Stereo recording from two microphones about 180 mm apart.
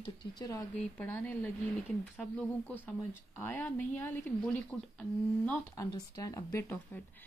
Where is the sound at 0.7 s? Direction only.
10° left (ahead or behind).